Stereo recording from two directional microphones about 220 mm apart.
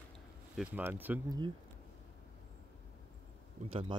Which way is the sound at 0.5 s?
5° right (ahead or behind).